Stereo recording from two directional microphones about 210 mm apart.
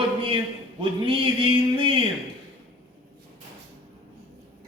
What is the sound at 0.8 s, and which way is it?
Speech, 25° right (ahead or behind).